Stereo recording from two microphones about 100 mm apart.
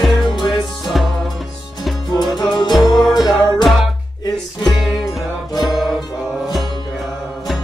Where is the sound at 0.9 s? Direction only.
Centre (ahead or behind).